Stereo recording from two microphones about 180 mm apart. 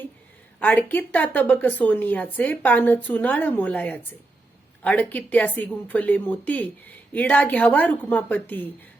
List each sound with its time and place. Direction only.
0.6 s speech: 10° left (ahead or behind)